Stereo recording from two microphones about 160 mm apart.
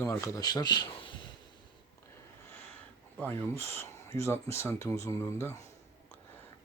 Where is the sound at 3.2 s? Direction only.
15° left (ahead or behind).